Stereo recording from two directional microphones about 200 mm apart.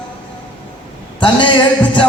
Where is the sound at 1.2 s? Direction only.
25° left (ahead or behind).